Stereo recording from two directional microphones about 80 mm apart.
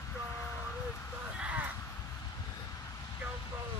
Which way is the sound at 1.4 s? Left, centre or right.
Centre.